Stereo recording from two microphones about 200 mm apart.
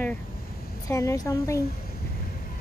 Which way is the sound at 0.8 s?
15° left (ahead or behind).